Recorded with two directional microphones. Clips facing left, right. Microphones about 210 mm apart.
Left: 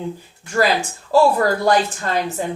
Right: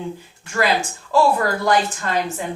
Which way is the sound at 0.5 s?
35° left (ahead or behind).